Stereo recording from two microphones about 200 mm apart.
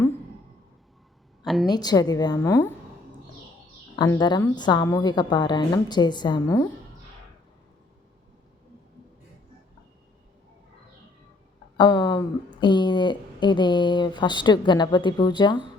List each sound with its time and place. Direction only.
1.6 s speech: 20° left (ahead or behind)
3.9 s speech: 20° left (ahead or behind)
11.8 s speech: 20° left (ahead or behind)